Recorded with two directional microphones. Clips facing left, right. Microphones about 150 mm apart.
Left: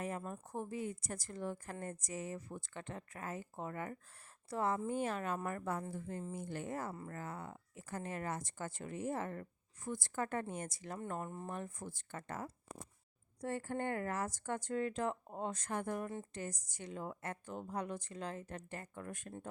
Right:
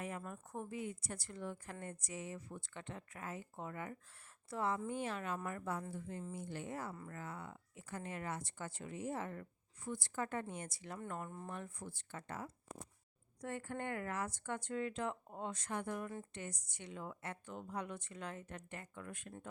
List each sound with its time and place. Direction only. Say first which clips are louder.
0.0 s a woman's voice: left 3 dB; 35° left (ahead or behind)
13.4 s a woman's voice: left 4 dB; 35° left (ahead or behind)